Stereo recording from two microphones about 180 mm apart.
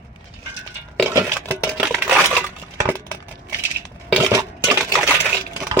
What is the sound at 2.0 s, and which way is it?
Crushing, 5° right (ahead or behind).